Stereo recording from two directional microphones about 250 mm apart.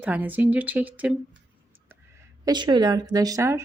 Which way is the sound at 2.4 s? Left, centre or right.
Centre.